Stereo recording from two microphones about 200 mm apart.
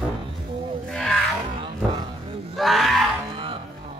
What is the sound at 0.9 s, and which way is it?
Music, 5° left (ahead or behind).